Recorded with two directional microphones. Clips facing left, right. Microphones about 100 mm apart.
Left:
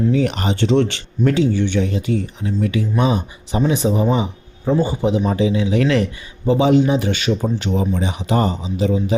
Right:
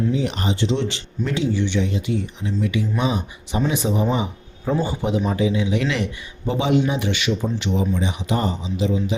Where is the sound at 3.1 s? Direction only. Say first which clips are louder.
Left 4 dB; 30° left (ahead or behind).